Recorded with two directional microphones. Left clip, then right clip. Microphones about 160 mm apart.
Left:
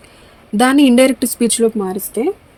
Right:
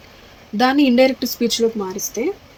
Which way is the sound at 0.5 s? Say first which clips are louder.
Left 3 dB; 90° left.